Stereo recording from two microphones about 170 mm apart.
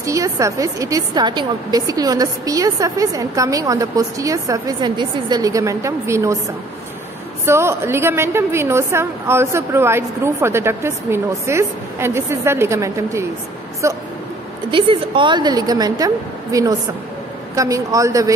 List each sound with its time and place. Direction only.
0.0 s a woman's voice: 20° right (ahead or behind)
7.4 s a woman's voice: 15° right (ahead or behind)
14.7 s a woman's voice: 30° right (ahead or behind)